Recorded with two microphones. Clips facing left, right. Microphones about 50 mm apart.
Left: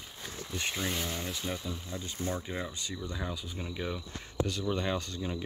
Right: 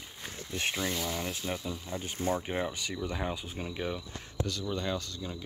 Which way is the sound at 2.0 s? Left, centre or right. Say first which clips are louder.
Right 5 dB; right.